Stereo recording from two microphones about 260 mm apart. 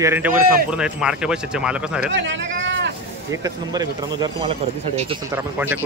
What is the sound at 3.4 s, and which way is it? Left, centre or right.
Speech, centre.